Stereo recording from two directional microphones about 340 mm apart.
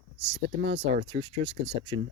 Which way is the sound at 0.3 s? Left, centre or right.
Right.